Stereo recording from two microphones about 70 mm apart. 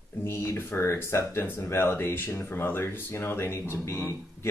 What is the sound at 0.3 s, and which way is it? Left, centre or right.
Speech, left.